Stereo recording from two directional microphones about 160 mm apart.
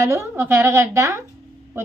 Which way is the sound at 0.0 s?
15° right (ahead or behind).